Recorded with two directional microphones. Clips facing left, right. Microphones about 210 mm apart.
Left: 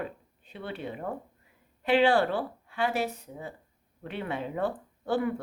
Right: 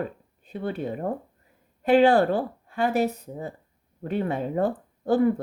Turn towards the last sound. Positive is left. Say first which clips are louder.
# right 7 dB
turn(degrees=-40)  # may be behind; listen again after turning